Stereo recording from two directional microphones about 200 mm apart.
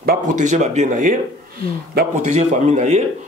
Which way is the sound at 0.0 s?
45° right (ahead or behind).